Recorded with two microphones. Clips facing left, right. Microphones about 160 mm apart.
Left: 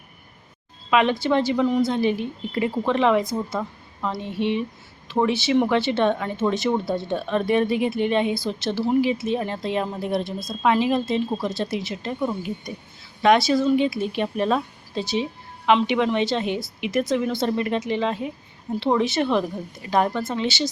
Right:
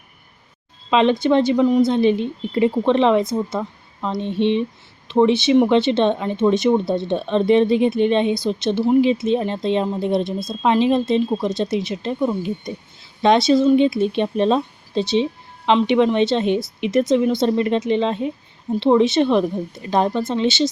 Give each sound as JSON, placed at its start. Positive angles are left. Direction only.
{"t": 0.9, "sound": "speech", "side_deg": -25}